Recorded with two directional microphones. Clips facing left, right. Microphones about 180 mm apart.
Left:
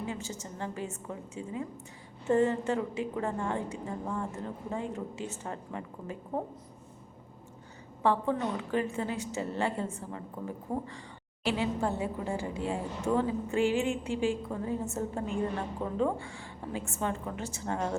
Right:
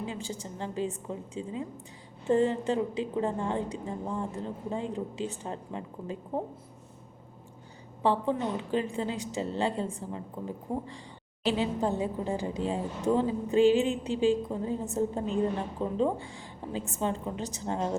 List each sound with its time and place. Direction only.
0.0 s a woman's voice: 20° right (ahead or behind)
8.0 s a woman's voice: 20° right (ahead or behind)